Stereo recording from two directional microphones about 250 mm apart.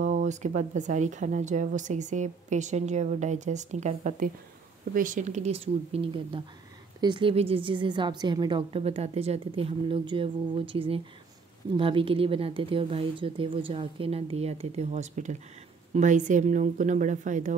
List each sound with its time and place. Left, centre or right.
0.0 s a woman's voice: right